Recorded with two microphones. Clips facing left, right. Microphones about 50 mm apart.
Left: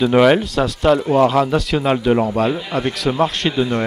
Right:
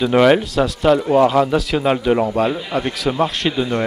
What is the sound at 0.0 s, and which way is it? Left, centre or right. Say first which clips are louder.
Speech: even; centre.